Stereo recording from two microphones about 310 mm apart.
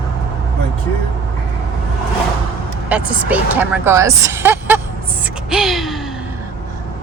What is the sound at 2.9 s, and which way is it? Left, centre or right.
A woman's voice, centre.